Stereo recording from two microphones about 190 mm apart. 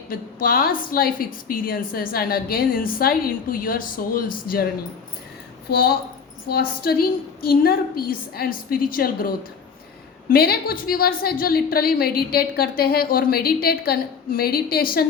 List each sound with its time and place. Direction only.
0.1 s a woman's voice: 50° left (ahead or behind)
5.6 s a woman's voice: 55° left (ahead or behind)